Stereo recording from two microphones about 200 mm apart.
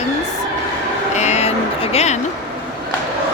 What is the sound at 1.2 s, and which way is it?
Vehicle, 35° left (ahead or behind).